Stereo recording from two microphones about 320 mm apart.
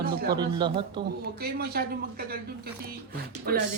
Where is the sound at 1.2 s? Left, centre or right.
Right.